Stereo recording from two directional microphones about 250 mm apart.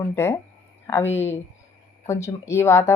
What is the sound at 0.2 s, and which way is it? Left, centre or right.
Speech, centre.